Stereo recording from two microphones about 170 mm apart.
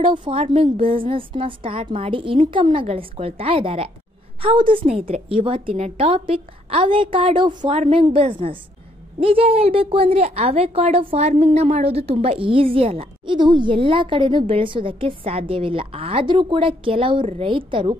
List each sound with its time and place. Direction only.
0.0 s a woman's voice: 30° right (ahead or behind)